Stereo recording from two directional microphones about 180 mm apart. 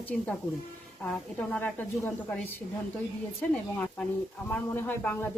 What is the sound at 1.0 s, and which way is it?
A woman's voice, 5° left (ahead or behind).